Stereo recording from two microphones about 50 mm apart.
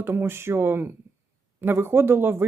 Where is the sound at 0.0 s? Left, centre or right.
Right.